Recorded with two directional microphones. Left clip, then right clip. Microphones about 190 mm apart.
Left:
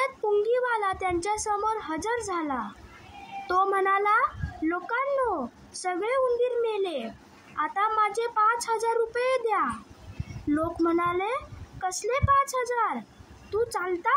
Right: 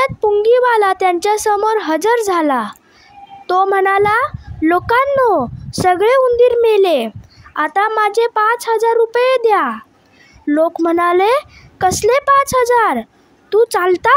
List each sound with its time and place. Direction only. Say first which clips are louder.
0.0 s a child's voice: right 12 dB; 50° right (ahead or behind)